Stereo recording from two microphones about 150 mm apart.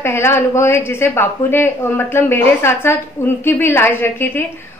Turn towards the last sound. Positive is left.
turn(degrees=15)  # may be behind; listen again after turning